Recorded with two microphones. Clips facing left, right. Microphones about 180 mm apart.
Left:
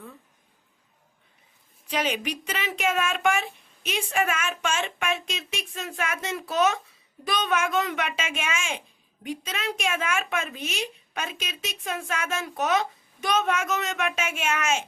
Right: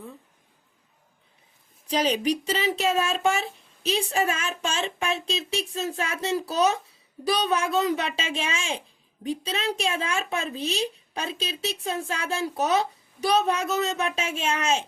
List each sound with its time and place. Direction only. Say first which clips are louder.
1.9 s speech: right 4 dB; 35° right (ahead or behind)